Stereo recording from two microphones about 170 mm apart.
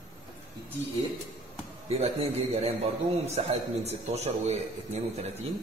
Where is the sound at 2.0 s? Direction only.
35° right (ahead or behind).